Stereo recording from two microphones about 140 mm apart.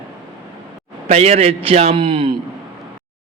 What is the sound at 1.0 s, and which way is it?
A man's voice, 50° right (ahead or behind).